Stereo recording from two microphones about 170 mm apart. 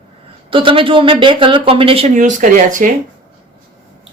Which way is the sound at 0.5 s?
30° right (ahead or behind).